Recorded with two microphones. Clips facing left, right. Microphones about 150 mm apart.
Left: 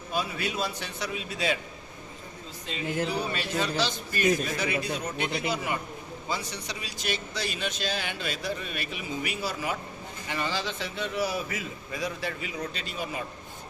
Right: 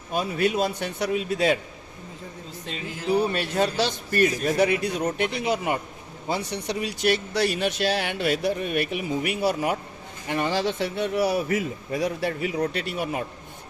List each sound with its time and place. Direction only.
0.1 s a man's voice: 50° right (ahead or behind)
3.1 s speech: 55° right (ahead or behind)
11.4 s a man's voice: 45° right (ahead or behind)
11.9 s speech: 60° right (ahead or behind)